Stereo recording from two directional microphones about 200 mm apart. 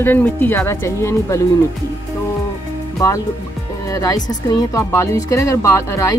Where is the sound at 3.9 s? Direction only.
20° left (ahead or behind).